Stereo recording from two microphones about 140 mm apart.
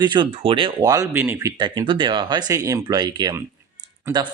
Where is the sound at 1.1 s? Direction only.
15° right (ahead or behind).